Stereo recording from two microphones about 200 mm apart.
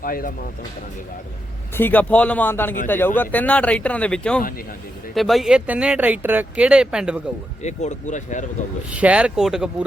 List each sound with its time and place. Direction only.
0.0 s speech: 45° left (ahead or behind)
1.7 s speech: 10° left (ahead or behind)
7.6 s speech: 35° left (ahead or behind)
8.9 s speech: 5° right (ahead or behind)